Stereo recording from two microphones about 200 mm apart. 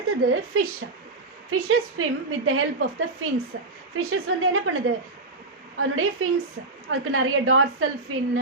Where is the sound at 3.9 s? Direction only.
90° right.